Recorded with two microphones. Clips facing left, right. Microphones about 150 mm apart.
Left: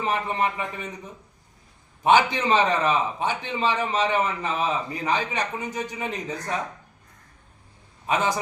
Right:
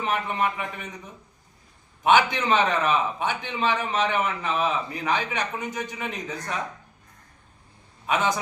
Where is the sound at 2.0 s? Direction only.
35° left (ahead or behind).